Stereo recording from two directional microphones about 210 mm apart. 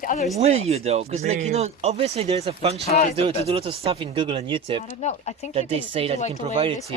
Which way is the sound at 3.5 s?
30° right (ahead or behind).